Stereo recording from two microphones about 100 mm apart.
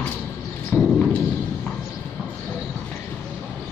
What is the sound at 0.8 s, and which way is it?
Thump, 5° left (ahead or behind).